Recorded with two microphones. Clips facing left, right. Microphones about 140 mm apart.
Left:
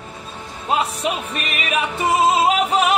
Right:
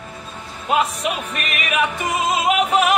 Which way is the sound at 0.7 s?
30° left (ahead or behind).